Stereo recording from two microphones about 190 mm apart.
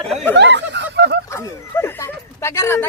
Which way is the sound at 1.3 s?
15° left (ahead or behind).